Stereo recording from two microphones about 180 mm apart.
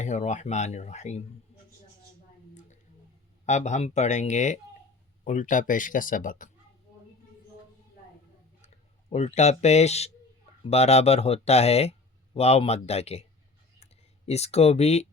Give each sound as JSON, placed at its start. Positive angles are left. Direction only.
{"t": 0.0, "sound": "speech", "side_deg": 40}
{"t": 3.4, "sound": "speech", "side_deg": 40}
{"t": 8.6, "sound": "speech", "side_deg": 40}
{"t": 14.3, "sound": "speech", "side_deg": 35}